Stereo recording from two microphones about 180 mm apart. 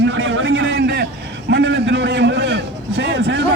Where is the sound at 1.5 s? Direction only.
75° right (ahead or behind).